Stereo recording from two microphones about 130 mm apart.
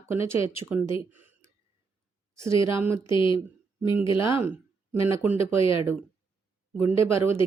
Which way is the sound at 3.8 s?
15° right (ahead or behind).